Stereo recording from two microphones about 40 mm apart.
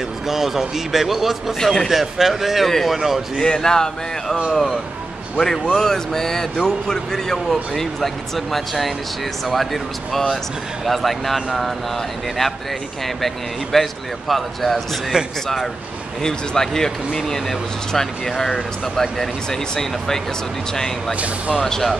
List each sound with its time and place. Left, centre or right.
0.3 s a man's voice: centre
1.6 s speech: centre
1.9 s a man's voice: centre
3.3 s speech: centre
5.4 s speech: centre
13.0 s speech: centre
15.1 s speech: right
16.2 s speech: centre
21.6 s speech: centre